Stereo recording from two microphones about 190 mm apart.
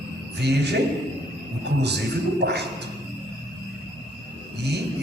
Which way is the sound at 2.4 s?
60° right (ahead or behind).